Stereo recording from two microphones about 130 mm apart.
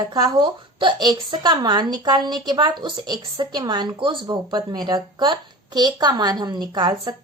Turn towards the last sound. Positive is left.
turn(degrees=-35)  # may be behind; listen again after turning